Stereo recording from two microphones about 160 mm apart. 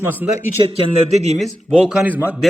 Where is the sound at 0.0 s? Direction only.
10° right (ahead or behind).